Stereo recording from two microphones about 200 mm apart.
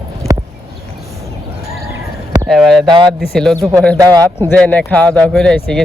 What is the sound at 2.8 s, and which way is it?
Speech, 20° right (ahead or behind).